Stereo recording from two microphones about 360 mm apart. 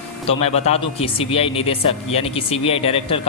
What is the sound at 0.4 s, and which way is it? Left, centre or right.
A man's voice, centre.